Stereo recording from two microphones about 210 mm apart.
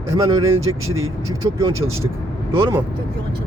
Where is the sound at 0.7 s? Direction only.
20° right (ahead or behind).